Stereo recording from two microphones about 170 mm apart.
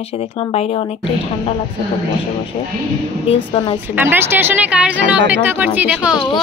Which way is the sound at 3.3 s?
35° left (ahead or behind).